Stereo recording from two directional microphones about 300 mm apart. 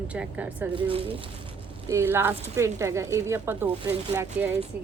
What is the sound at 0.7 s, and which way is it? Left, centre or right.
Speech, centre.